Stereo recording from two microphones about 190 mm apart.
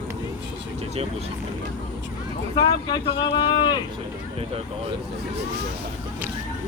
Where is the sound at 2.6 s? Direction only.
20° left (ahead or behind).